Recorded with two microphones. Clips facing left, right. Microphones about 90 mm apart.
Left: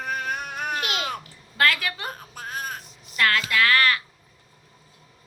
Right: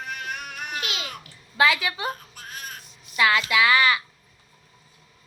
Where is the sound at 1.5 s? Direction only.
5° right (ahead or behind).